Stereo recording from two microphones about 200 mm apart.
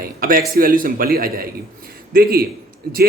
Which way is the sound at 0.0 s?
45° right (ahead or behind).